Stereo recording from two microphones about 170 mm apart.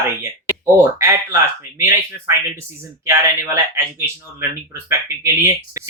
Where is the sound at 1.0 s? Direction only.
15° right (ahead or behind).